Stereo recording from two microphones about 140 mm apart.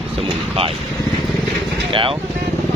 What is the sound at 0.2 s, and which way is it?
Vehicle, 40° right (ahead or behind).